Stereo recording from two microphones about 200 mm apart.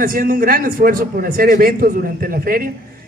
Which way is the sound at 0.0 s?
45° right (ahead or behind).